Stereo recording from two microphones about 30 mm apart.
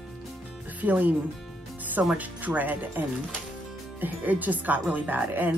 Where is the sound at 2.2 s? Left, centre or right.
Right.